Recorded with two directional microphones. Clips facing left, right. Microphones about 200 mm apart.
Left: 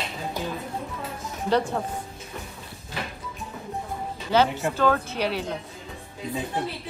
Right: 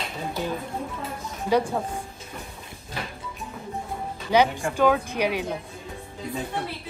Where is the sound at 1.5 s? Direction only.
10° right (ahead or behind).